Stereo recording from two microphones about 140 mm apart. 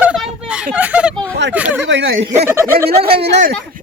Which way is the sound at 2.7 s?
90° right.